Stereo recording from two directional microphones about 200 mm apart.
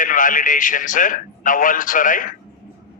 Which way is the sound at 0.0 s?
40° left (ahead or behind).